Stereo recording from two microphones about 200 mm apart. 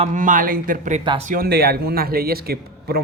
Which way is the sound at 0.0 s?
40° right (ahead or behind).